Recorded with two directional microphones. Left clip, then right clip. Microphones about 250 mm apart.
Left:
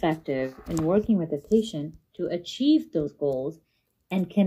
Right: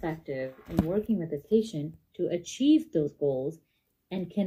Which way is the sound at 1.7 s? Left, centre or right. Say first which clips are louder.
Left 3 dB; centre.